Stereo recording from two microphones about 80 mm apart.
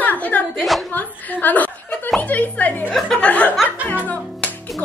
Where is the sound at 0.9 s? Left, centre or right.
Left.